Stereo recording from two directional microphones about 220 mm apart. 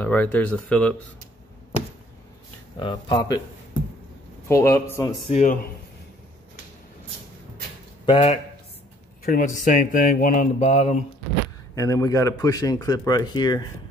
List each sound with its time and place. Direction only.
0.0 s a man's voice: 10° left (ahead or behind)
2.8 s speech: 20° left (ahead or behind)
4.5 s a man's voice: 10° left (ahead or behind)
5.3 s speech: 35° left (ahead or behind)
8.0 s speech: 25° left (ahead or behind)
9.2 s speech: 40° left (ahead or behind)
11.7 s a man's voice: 15° left (ahead or behind)